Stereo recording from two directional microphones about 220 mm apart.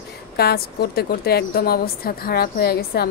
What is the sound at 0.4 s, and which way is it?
A woman's voice, 45° left (ahead or behind).